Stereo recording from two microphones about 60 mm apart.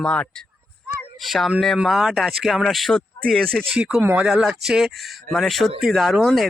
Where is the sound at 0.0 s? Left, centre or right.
Centre.